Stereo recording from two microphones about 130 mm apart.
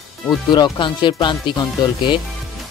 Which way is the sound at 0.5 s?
35° left (ahead or behind).